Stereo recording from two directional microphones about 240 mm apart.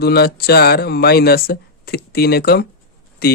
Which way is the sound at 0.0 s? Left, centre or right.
Left.